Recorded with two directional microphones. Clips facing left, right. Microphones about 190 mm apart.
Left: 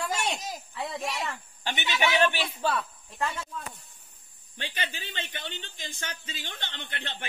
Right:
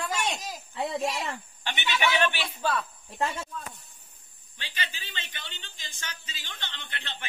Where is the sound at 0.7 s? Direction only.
25° right (ahead or behind).